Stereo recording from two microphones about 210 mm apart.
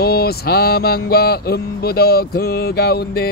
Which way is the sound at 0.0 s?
50° left (ahead or behind).